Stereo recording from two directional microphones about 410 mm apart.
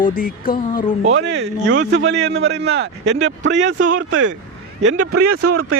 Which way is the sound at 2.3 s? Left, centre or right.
Centre.